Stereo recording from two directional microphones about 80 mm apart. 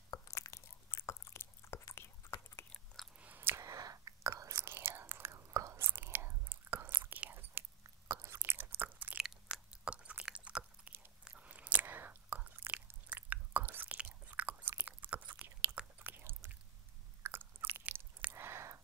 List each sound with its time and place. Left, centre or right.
0.3 s biting: left
2.0 s whispering: left
3.2 s chewing: right
3.6 s whispering: right
4.6 s whispering: right
7.0 s chewing: right
7.8 s chewing: right
8.3 s chewing: right
9.2 s chewing: centre; by 16.3 s right
17.2 s biting: right
17.8 s chewing: centre
18.3 s a sound: right